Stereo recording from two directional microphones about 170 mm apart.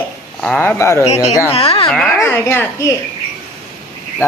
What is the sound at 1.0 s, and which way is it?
Speech, 40° left (ahead or behind).